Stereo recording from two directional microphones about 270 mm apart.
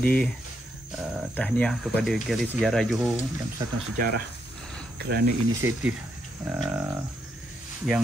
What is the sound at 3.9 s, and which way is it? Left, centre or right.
Speech, right.